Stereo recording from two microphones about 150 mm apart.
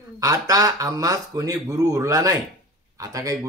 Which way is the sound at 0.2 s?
25° right (ahead or behind).